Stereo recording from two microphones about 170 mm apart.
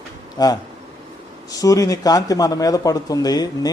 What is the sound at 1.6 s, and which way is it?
A man's voice, 20° left (ahead or behind).